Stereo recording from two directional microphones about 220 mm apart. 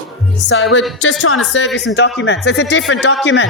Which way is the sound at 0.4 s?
60° left (ahead or behind).